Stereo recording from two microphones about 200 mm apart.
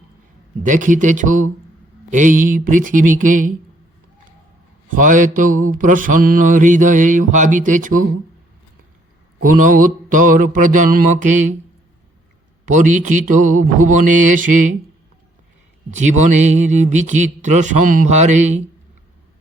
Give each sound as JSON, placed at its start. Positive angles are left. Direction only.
{"t": 0.6, "sound": "mantra", "side_deg": -40}
{"t": 4.9, "sound": "mantra", "side_deg": -40}
{"t": 9.4, "sound": "mantra", "side_deg": -45}
{"t": 12.6, "sound": "mantra", "side_deg": -40}
{"t": 15.9, "sound": "mantra", "side_deg": -35}